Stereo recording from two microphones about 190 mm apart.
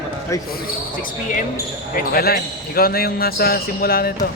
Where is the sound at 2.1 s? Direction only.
55° left (ahead or behind).